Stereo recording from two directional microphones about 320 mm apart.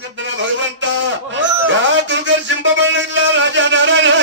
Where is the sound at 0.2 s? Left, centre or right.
Right.